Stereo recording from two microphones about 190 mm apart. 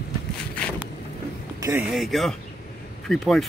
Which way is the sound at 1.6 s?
10° right (ahead or behind).